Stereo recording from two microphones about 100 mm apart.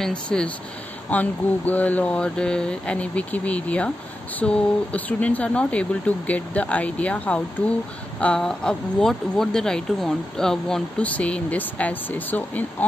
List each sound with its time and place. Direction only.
0.0 s speech: 10° left (ahead or behind)